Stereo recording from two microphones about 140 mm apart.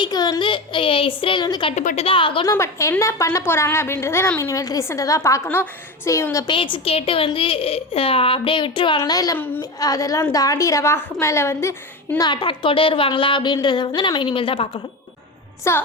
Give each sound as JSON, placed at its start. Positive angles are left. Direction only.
{"t": 0.0, "sound": "a woman's voice", "side_deg": 30}
{"t": 1.7, "sound": "a woman's voice", "side_deg": 60}
{"t": 2.0, "sound": "a woman's voice", "side_deg": 40}
{"t": 2.5, "sound": "a woman's voice", "side_deg": 20}
{"t": 6.5, "sound": "a woman's voice", "side_deg": 40}
{"t": 9.0, "sound": "a woman's voice", "side_deg": 25}
{"t": 9.4, "sound": "a woman's voice", "side_deg": 15}
{"t": 9.8, "sound": "a woman's voice", "side_deg": 25}
{"t": 12.1, "sound": "a woman's voice", "side_deg": 30}
{"t": 15.7, "sound": "a woman's voice", "side_deg": 20}